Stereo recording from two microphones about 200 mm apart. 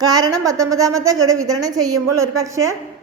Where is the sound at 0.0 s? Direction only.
20° right (ahead or behind).